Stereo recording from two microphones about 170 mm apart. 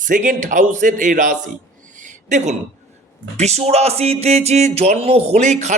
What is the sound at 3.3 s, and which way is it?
Music, 40° right (ahead or behind).